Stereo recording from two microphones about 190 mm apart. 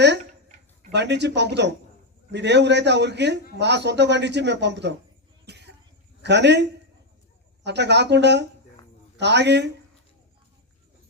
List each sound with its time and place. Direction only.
0.9 s speech: 65° right (ahead or behind)
5.5 s cough: 60° right (ahead or behind)
6.2 s speech: 65° right (ahead or behind)